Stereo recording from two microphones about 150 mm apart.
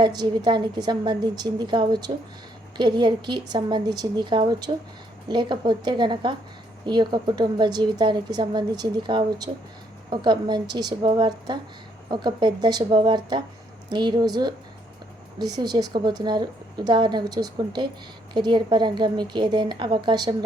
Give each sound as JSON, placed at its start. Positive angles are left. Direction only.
{"t": 0.0, "sound": "a woman's voice", "side_deg": -30}